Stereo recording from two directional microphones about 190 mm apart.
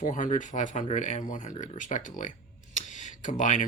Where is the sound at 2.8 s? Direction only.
40° left (ahead or behind).